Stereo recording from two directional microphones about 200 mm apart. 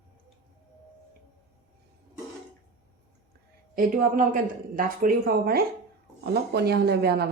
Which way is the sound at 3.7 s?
45° right (ahead or behind).